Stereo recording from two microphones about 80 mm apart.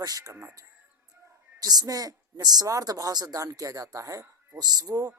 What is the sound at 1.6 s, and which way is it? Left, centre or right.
Speech, right.